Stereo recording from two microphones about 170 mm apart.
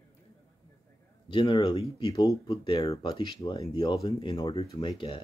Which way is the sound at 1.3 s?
30° left (ahead or behind).